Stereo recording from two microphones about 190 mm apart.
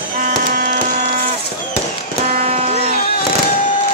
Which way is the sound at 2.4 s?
35° right (ahead or behind).